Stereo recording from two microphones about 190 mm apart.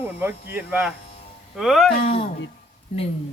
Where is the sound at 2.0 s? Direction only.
35° left (ahead or behind).